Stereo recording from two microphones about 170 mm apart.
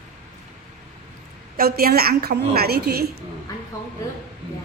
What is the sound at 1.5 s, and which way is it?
A woman's voice, 60° right (ahead or behind).